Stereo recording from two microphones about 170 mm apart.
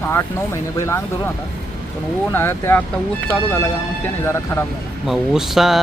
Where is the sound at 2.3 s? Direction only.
15° left (ahead or behind).